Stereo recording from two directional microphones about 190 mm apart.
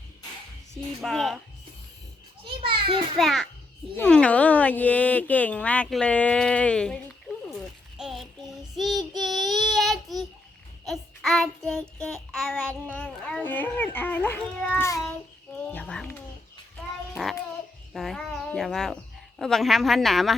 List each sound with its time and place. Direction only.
1.0 s a woman's voice: centre (ahead or behind)
2.6 s children playing: 25° right (ahead or behind)
3.2 s a woman's voice: centre (ahead or behind)
7.9 s child singing: centre (ahead or behind)
12.3 s speech: 10° left (ahead or behind)
15.7 s a sound: 5° left (ahead or behind)
17.2 s babbling: centre (ahead or behind)
17.9 s a child's voice: centre (ahead or behind)